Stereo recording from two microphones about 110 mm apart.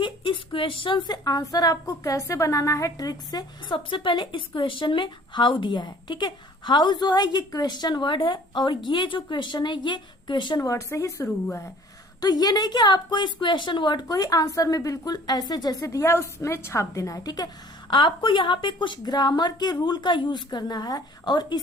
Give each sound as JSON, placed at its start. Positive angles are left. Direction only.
{"t": 0.0, "sound": "speech", "side_deg": 50}
{"t": 10.6, "sound": "a woman's voice", "side_deg": 30}
{"t": 17.9, "sound": "a woman's voice", "side_deg": 45}